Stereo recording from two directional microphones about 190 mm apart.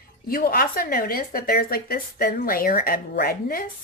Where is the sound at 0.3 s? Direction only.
50° left (ahead or behind).